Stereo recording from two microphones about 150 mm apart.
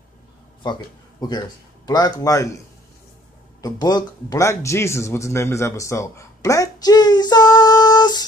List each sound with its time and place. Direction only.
0.6 s speech: 30° left (ahead or behind)
1.9 s a man's voice: 25° left (ahead or behind)
3.6 s a man's voice: 25° left (ahead or behind)